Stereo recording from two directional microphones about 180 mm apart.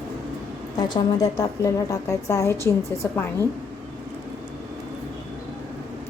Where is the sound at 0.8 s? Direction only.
20° left (ahead or behind).